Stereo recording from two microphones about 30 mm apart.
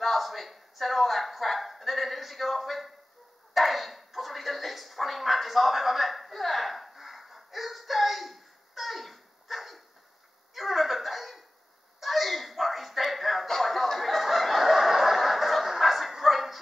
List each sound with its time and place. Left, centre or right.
0.0 s speech: centre
3.5 s a sound: centre
13.5 s chicken: centre